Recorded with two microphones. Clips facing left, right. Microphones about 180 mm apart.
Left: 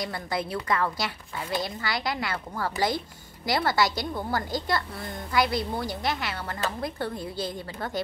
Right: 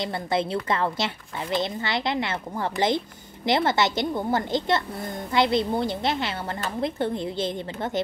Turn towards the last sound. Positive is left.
turn(degrees=-25)  # may be behind; listen again after turning